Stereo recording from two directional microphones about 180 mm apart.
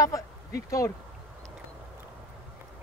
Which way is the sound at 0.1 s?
20° left (ahead or behind).